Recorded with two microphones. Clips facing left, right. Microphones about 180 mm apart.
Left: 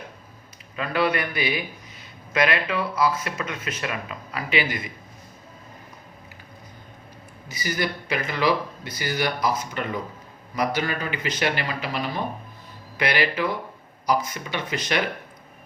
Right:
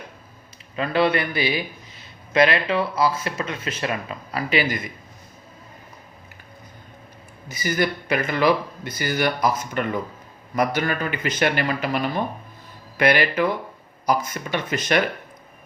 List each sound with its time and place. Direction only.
0.8 s a man's voice: 30° right (ahead or behind)
7.4 s speech: 50° right (ahead or behind)